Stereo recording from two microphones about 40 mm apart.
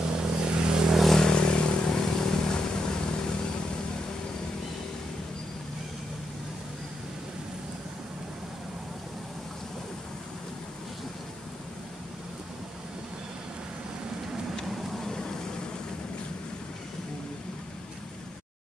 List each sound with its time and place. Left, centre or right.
0.0 s vehicle: right
0.8 s vehicle: centre
1.1 s vehicle: centre
1.9 s vehicle: centre
15.0 s vehicle: centre